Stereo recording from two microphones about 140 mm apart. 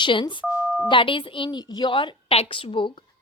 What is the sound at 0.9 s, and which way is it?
A woman's voice, 35° left (ahead or behind).